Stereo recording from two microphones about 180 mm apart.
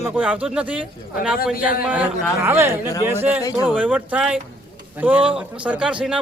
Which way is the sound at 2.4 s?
15° right (ahead or behind).